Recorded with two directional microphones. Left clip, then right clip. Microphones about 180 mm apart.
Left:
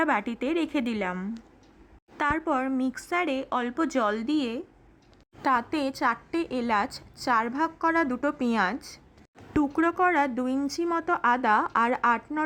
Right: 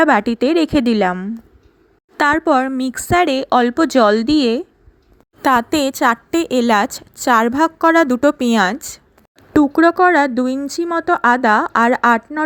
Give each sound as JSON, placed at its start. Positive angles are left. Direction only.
{"t": 0.0, "sound": "a woman's voice", "side_deg": -30}
{"t": 2.1, "sound": "a woman's voice", "side_deg": -30}